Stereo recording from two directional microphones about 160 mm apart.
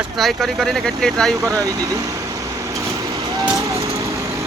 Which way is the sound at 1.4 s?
20° right (ahead or behind).